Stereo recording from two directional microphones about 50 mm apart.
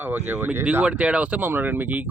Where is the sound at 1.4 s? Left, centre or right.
Right.